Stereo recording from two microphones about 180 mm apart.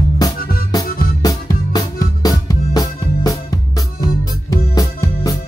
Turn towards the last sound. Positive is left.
turn(degrees=20)  # may be behind; listen again after turning